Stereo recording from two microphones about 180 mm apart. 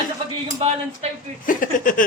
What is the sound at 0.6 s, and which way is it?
Speech, 35° right (ahead or behind).